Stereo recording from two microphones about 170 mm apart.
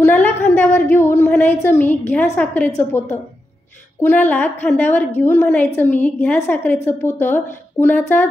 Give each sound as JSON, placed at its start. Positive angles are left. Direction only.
{"t": 0.0, "sound": "a sound", "side_deg": 10}
{"t": 0.7, "sound": "a woman's voice", "side_deg": 15}
{"t": 4.0, "sound": "a woman's voice", "side_deg": 10}